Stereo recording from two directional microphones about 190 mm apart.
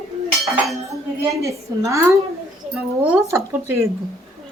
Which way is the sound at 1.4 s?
15° right (ahead or behind).